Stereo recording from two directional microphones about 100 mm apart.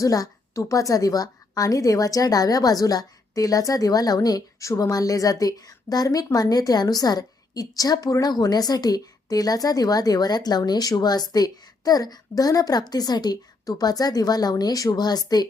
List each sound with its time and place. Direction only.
0.0 s a woman's voice: 35° left (ahead or behind)